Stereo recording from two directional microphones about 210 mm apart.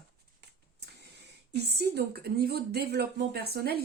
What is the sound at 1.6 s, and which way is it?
Speech, 50° right (ahead or behind).